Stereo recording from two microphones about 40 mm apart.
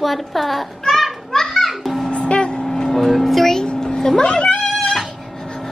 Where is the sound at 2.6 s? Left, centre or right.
Centre.